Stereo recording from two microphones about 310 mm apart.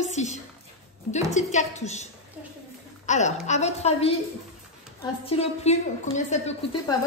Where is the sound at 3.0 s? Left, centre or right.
Left.